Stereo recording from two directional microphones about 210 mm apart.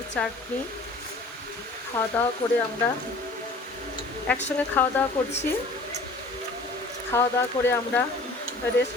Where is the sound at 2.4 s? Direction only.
25° left (ahead or behind).